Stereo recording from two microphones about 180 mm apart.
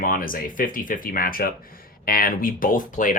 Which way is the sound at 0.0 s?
50° left (ahead or behind).